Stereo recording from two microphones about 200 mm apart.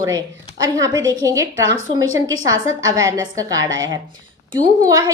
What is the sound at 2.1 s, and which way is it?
Speech, 80° right.